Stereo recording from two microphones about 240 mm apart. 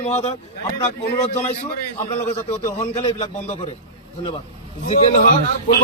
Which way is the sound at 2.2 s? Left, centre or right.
Left.